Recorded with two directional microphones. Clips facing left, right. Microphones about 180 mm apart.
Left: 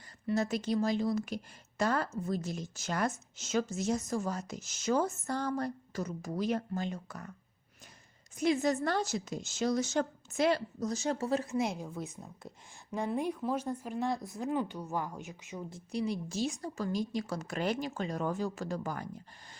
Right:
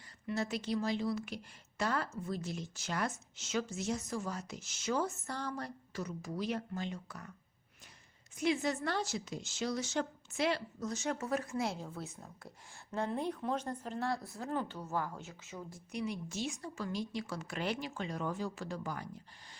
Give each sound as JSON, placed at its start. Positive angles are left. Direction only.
{"t": 0.3, "sound": "a woman's voice", "side_deg": 45}
{"t": 8.4, "sound": "a woman's voice", "side_deg": 40}
{"t": 15.9, "sound": "a woman's voice", "side_deg": 35}